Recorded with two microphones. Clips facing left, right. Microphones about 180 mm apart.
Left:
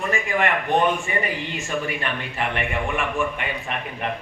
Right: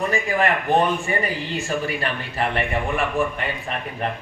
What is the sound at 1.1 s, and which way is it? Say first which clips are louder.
A man's voice: right 2 dB; 40° right (ahead or behind).